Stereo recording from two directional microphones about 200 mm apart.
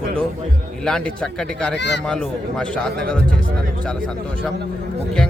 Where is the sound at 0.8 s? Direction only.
5° left (ahead or behind).